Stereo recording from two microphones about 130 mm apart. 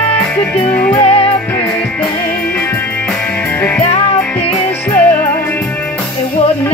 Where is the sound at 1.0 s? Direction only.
45° left (ahead or behind).